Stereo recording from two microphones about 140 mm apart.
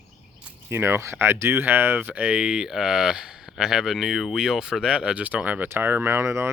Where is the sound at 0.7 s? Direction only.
15° right (ahead or behind).